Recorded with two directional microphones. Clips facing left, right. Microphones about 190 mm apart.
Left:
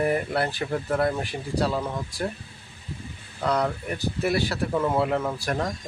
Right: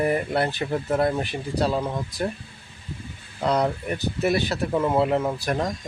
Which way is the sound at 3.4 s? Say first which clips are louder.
Right 2 dB; 20° right (ahead or behind).